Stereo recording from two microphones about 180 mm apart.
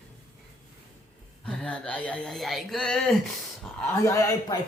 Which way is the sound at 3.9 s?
15° left (ahead or behind).